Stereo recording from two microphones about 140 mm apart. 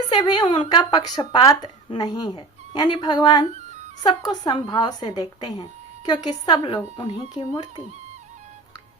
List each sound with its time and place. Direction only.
0.1 s speech: 30° left (ahead or behind)